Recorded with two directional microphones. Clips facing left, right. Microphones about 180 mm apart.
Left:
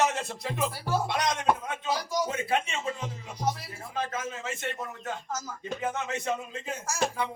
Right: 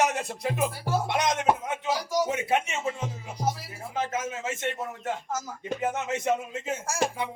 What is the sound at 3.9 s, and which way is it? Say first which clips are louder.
Speech: right 3 dB; 20° right (ahead or behind).